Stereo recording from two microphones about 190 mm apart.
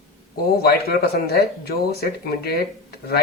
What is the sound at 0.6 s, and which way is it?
Speech, 55° left (ahead or behind).